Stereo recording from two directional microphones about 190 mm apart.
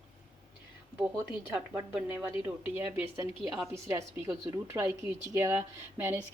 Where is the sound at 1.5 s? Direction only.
5° right (ahead or behind).